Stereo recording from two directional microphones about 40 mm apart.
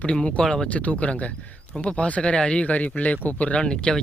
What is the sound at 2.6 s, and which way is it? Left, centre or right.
Speech, left.